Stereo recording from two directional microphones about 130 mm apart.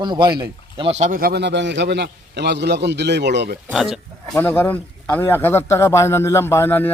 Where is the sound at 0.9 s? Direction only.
65° right (ahead or behind).